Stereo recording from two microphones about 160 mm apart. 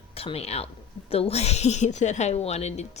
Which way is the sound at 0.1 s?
40° left (ahead or behind).